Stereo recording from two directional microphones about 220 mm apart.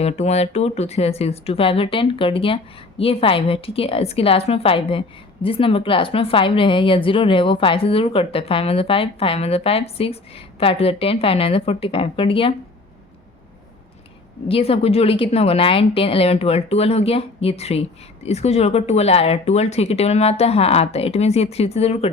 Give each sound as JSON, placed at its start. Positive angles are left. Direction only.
{"t": 0.0, "sound": "a woman's voice", "side_deg": 30}
{"t": 14.4, "sound": "a woman's voice", "side_deg": 25}